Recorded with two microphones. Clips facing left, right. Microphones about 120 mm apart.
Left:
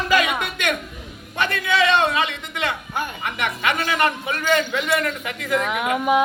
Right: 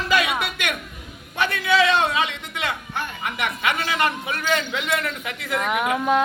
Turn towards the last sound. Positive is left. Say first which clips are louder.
# left 1 dB
turn(degrees=10)  # may be behind; listen again after turning